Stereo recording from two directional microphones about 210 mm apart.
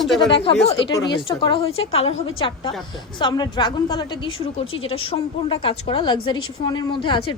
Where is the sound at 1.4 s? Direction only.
25° left (ahead or behind).